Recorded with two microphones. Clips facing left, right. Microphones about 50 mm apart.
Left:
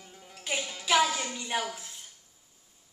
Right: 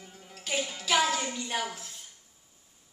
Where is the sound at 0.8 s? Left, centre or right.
Centre.